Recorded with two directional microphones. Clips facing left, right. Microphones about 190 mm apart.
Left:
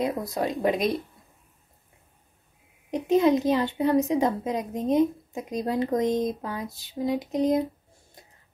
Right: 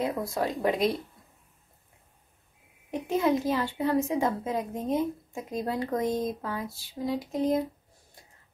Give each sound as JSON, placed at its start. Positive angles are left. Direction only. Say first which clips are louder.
{"t": 0.2, "sound": "speech", "louder": "left 2 dB", "side_deg": 20}
{"t": 2.9, "sound": "a woman's voice", "louder": "left 5 dB", "side_deg": 20}